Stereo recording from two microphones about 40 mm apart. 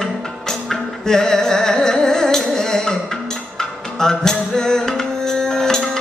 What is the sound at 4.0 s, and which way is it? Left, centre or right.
Music, centre.